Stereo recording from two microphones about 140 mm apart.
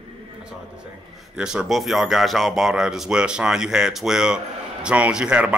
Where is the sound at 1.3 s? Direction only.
5° right (ahead or behind).